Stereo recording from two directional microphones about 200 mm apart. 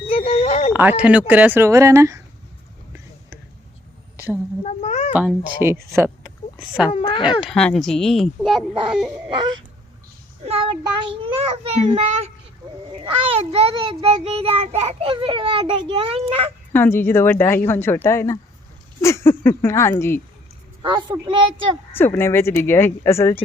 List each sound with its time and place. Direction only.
0.1 s a sound: 30° left (ahead or behind)
0.7 s speech: 10° right (ahead or behind)
4.6 s speech: 35° left (ahead or behind)
5.1 s speech: 10° right (ahead or behind)
6.9 s speech: 25° left (ahead or behind)
7.4 s speech: 5° left (ahead or behind)
8.9 s a sound: 5° right (ahead or behind)
10.4 s child singing: 30° right (ahead or behind)
16.7 s speech: 10° left (ahead or behind)
21.2 s child singing: 25° right (ahead or behind)
21.9 s speech: 10° left (ahead or behind)